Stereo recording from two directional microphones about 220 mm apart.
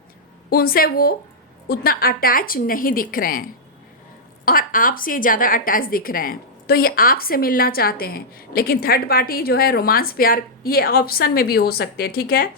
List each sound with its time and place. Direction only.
0.5 s a woman's voice: 40° left (ahead or behind)
4.4 s a woman's voice: 40° left (ahead or behind)